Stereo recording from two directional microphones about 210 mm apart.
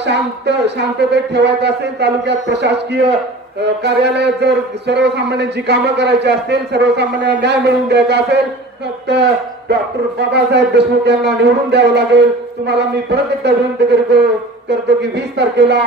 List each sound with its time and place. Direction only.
0.0 s a man's voice: 55° right (ahead or behind)